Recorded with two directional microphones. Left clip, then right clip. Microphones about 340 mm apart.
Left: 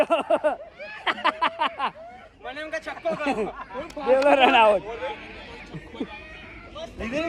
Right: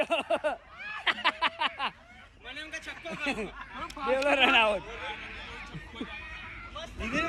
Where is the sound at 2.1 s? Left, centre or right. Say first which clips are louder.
Left 7 dB; centre.